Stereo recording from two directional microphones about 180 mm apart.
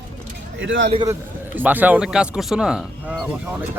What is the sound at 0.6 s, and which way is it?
Speech, 90° right.